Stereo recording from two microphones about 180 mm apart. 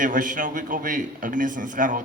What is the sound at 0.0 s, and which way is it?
A man's voice, 45° right (ahead or behind).